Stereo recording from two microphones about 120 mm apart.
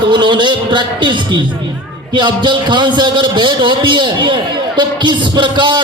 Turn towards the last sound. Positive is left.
turn(degrees=-40)  # may be behind; listen again after turning